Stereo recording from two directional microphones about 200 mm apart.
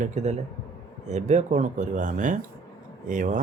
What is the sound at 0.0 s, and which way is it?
Speech, 35° right (ahead or behind).